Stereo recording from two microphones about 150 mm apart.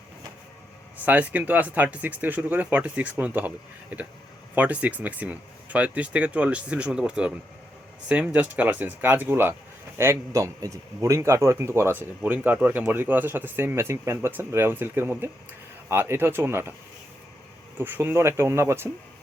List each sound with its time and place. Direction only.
1.0 s speech: 10° right (ahead or behind)
17.7 s speech: 15° right (ahead or behind)